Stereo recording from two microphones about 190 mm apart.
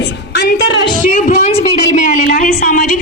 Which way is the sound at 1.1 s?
45° left (ahead or behind).